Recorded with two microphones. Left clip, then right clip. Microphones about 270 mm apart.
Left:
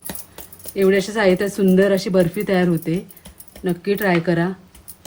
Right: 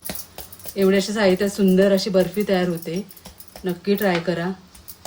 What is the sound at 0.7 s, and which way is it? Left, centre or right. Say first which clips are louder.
Speech: left 2 dB; left.